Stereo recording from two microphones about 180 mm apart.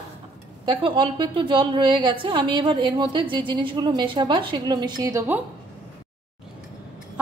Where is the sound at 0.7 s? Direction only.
30° right (ahead or behind).